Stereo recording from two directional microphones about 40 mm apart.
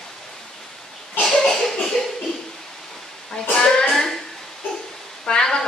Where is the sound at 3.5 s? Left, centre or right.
Centre.